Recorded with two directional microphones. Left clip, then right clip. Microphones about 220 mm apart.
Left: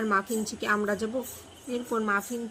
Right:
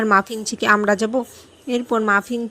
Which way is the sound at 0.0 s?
35° right (ahead or behind).